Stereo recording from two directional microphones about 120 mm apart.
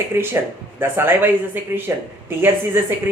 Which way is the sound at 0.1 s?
20° right (ahead or behind).